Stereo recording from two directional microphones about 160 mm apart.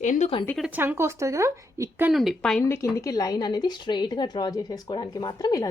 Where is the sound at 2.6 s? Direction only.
20° left (ahead or behind).